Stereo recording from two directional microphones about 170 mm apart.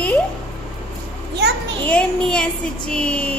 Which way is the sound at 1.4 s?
80° right.